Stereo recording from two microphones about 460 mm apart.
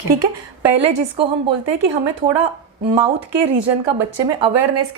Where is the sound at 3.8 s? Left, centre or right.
Right.